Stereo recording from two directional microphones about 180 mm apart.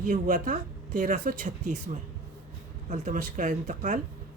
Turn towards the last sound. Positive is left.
turn(degrees=-45)  # may be behind; listen again after turning